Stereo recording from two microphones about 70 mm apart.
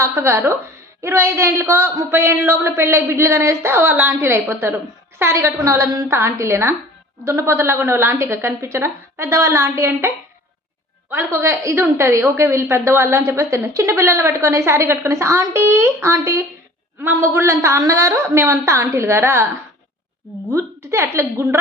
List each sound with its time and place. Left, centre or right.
0.0 s a woman's voice: right
11.3 s a woman's voice: right
20.5 s a woman's voice: right